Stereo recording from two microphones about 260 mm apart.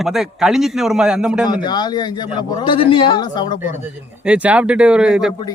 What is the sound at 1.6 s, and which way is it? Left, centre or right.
A man's voice, centre.